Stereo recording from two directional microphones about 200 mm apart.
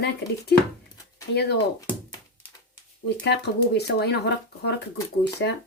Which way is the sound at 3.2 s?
55° left (ahead or behind).